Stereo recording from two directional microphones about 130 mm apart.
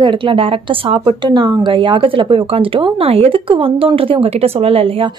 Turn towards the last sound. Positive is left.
turn(degrees=-45)  # may be behind; listen again after turning